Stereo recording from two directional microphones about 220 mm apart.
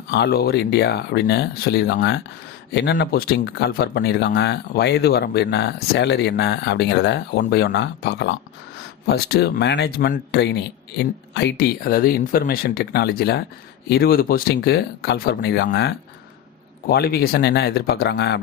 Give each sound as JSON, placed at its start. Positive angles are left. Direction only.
{"t": 0.1, "sound": "speech", "side_deg": 45}